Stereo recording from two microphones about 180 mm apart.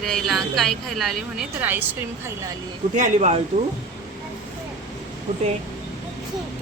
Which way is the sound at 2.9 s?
40° right (ahead or behind).